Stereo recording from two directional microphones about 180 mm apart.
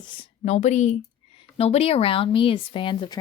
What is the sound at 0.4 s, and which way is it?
A woman's voice, 40° left (ahead or behind).